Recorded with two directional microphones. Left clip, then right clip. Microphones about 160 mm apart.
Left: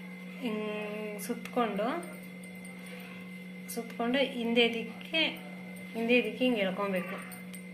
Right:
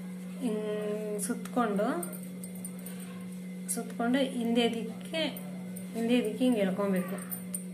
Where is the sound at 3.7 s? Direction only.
15° left (ahead or behind).